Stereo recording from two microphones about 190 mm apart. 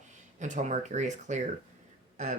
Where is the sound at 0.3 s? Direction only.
40° right (ahead or behind).